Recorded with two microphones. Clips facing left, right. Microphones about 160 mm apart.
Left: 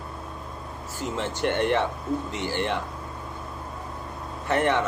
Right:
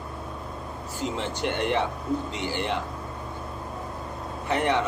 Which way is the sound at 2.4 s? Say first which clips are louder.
Left 2 dB; 15° right (ahead or behind).